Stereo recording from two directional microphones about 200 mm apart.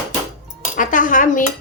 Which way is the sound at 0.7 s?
40° left (ahead or behind).